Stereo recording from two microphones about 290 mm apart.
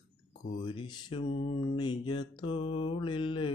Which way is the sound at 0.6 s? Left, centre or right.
Centre.